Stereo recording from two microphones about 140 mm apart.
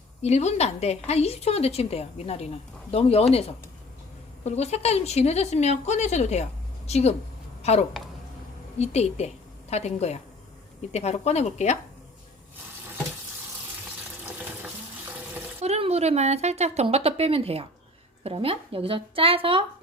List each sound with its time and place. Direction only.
0.2 s a woman's voice: 50° left (ahead or behind)
14.3 s frying: 10° right (ahead or behind)
15.6 s a woman's voice: 50° right (ahead or behind)